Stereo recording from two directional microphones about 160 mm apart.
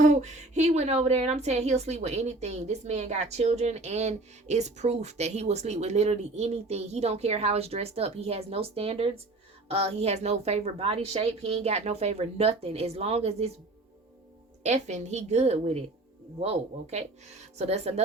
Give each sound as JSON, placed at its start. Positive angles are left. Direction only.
{"t": 0.0, "sound": "speech", "side_deg": -45}
{"t": 14.6, "sound": "speech", "side_deg": -45}